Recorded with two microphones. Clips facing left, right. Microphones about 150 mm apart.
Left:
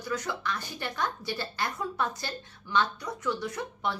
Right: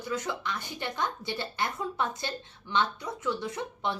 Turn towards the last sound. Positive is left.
turn(degrees=-25)  # may be behind; listen again after turning